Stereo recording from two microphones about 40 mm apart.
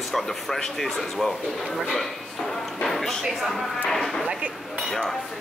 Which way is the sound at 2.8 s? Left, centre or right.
Centre.